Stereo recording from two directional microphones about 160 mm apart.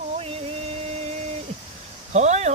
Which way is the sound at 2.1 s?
45° right (ahead or behind).